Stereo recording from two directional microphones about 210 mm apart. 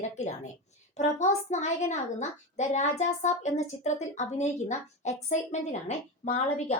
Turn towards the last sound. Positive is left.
turn(degrees=35)  # may be behind; listen again after turning